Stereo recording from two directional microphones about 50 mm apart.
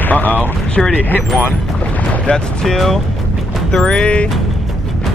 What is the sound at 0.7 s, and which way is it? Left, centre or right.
Speech, centre.